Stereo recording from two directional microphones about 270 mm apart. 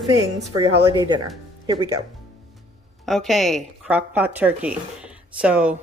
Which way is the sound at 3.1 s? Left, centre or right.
Centre.